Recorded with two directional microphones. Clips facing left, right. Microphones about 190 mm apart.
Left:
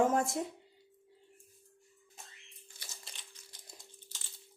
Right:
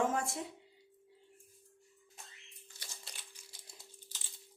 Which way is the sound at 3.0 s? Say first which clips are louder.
Even; 10° right (ahead or behind).